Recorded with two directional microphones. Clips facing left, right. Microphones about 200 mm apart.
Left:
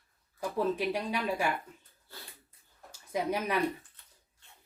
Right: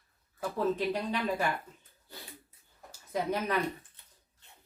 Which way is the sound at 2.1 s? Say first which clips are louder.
Right 2 dB; 15° right (ahead or behind).